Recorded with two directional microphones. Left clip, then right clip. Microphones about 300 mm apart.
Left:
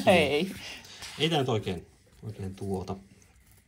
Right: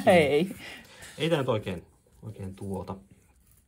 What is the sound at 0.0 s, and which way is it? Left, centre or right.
Speech, right.